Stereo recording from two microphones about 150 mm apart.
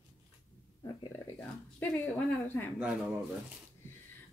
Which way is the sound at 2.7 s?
10° right (ahead or behind).